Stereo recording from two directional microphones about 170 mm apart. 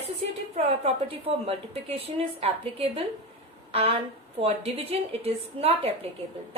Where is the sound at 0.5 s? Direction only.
35° right (ahead or behind).